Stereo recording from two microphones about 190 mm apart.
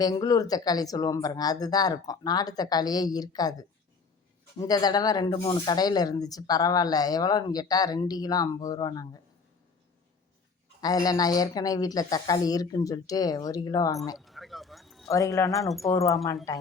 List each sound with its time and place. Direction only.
0.0 s speech: 20° left (ahead or behind)
10.8 s speech: 20° left (ahead or behind)
14.2 s a sound: centre (ahead or behind)
15.1 s speech: 15° left (ahead or behind)
15.4 s speech: centre (ahead or behind)